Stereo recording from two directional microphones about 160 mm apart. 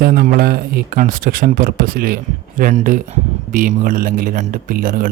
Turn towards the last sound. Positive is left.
turn(degrees=-60)  # may be behind; listen again after turning